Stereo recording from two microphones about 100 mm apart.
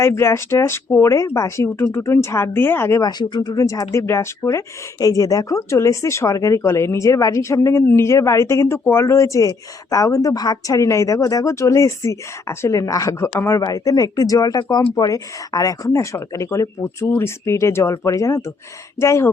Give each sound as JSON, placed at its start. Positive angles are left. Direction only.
{"t": 0.0, "sound": "speech", "side_deg": 25}
{"t": 3.0, "sound": "speech", "side_deg": 45}
{"t": 14.6, "sound": "speech", "side_deg": 45}